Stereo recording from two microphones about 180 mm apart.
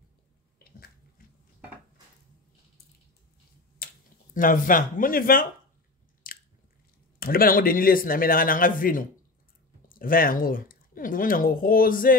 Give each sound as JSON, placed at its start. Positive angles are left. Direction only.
{"t": 3.8, "sound": "speech", "side_deg": 50}
{"t": 6.2, "sound": "biting", "side_deg": 50}
{"t": 7.2, "sound": "a man's voice", "side_deg": 55}